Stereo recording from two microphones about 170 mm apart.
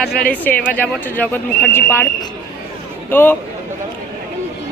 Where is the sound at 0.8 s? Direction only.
10° left (ahead or behind).